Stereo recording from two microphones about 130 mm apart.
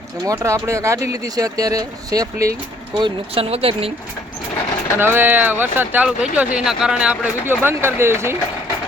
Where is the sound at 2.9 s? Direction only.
40° right (ahead or behind).